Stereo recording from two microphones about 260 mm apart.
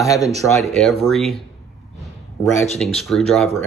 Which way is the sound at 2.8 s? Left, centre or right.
Centre.